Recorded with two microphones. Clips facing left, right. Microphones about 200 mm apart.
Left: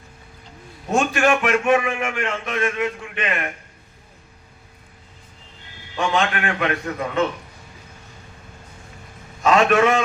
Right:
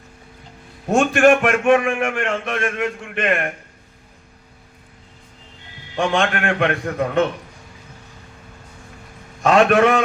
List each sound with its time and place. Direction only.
0.9 s a man's voice: 55° right (ahead or behind)
6.0 s a man's voice: 50° right (ahead or behind)
9.4 s a man's voice: 55° right (ahead or behind)